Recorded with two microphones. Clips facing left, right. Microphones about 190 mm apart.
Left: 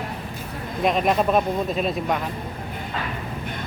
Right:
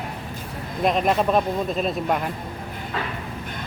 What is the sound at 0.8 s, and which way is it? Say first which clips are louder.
Speech: even; centre (ahead or behind).